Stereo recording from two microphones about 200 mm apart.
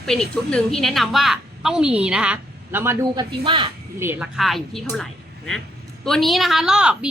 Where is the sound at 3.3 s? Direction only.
25° right (ahead or behind).